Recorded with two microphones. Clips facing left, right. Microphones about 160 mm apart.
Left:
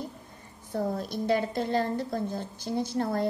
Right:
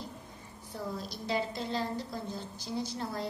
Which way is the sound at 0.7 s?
55° left (ahead or behind).